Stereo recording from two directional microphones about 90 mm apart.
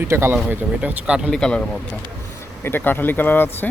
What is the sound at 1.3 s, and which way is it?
Speech, 5° left (ahead or behind).